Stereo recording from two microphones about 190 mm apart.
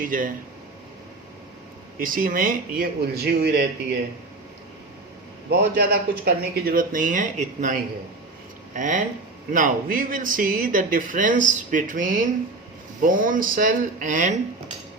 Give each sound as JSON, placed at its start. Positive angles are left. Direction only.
{"t": 0.0, "sound": "speech", "side_deg": -45}
{"t": 2.0, "sound": "speech", "side_deg": -45}
{"t": 5.5, "sound": "speech", "side_deg": -60}